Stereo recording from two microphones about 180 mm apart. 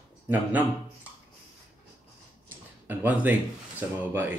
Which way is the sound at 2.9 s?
10° right (ahead or behind).